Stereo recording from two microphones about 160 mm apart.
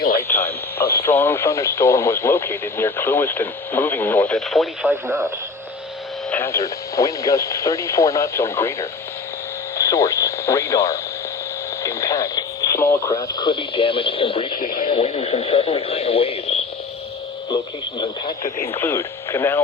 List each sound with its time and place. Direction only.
0.2 s radio: 15° left (ahead or behind)
0.8 s radio: 75° left (ahead or behind)
1.0 s speech: 15° left (ahead or behind)
4.4 s speech: centre (ahead or behind)
4.9 s speech: 15° right (ahead or behind)
6.3 s speech: 15° left (ahead or behind); by 16.6 s 40° left (ahead or behind)
18.0 s speech: 25° left (ahead or behind)
18.8 s speech: 15° left (ahead or behind)